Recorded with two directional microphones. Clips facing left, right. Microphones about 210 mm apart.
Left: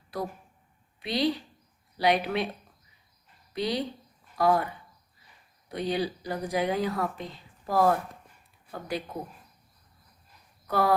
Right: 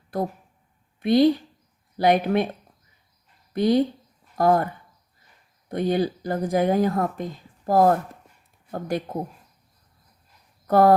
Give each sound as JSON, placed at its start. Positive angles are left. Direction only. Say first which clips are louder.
{"t": 0.1, "sound": "a woman's voice", "louder": "right 7 dB", "side_deg": -50}
{"t": 3.5, "sound": "speech", "louder": "right 10 dB", "side_deg": -50}
{"t": 10.7, "sound": "speech", "louder": "right 9 dB", "side_deg": -50}